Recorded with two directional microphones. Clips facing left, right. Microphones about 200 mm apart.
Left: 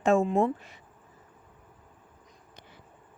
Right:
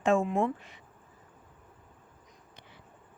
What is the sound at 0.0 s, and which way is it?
Speech, 40° left (ahead or behind).